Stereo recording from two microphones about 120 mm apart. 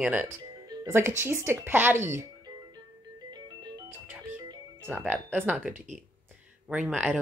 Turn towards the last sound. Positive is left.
turn(degrees=-10)  # may be behind; listen again after turning